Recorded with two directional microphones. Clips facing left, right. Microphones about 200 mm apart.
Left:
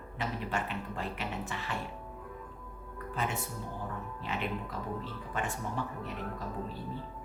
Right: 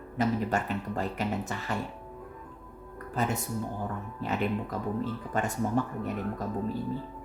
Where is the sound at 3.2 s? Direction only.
40° right (ahead or behind).